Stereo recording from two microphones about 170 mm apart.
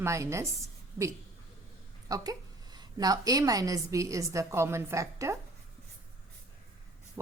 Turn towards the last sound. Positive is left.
turn(degrees=-15)  # may be behind; listen again after turning